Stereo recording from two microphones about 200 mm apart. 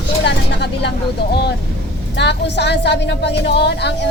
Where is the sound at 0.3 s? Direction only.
60° left (ahead or behind).